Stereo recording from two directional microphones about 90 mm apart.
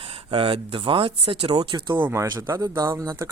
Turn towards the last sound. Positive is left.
turn(degrees=-40)  # may be behind; listen again after turning